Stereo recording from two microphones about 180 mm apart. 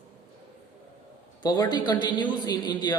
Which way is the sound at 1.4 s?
20° left (ahead or behind).